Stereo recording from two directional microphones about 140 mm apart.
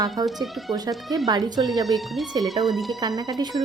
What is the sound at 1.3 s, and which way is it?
Speech, 30° right (ahead or behind).